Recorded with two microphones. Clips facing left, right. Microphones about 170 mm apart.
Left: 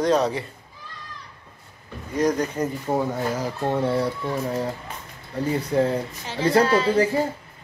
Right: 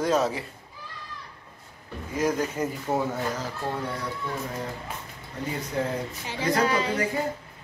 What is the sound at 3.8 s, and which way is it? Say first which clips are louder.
Speech: left 10 dB; 30° left (ahead or behind).